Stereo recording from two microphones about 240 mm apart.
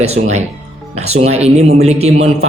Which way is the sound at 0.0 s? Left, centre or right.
Right.